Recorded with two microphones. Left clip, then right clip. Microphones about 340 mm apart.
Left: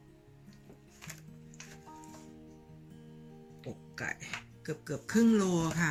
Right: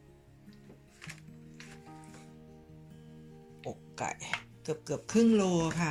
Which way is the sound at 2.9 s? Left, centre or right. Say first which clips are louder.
Left 2 dB; centre.